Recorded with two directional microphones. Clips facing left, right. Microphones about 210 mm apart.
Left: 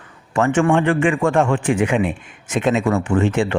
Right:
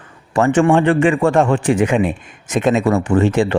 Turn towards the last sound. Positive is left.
turn(degrees=-35)  # may be behind; listen again after turning